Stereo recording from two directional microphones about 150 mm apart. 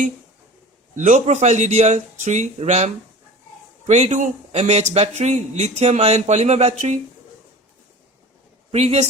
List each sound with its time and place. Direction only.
0.9 s speech: 55° right (ahead or behind)
8.7 s speech: 45° right (ahead or behind)